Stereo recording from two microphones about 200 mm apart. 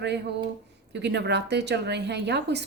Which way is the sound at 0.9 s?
60° right (ahead or behind).